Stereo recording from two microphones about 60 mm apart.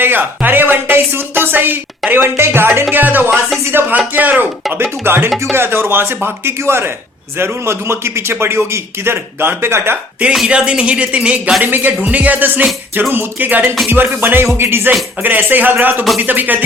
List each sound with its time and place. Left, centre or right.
0.0 s speech: right
2.3 s speech: right
3.9 s speech: right
4.7 s a man's voice: right
10.5 s speech: centre